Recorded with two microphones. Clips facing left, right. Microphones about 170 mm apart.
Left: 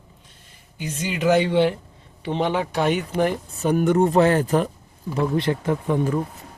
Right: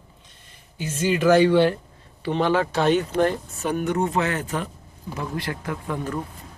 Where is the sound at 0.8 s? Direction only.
15° left (ahead or behind).